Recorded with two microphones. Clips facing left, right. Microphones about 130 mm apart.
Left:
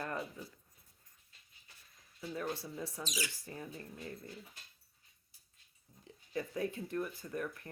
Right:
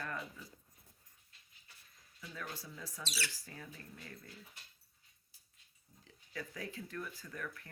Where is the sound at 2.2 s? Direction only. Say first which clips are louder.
Left 8 dB; 30° left (ahead or behind).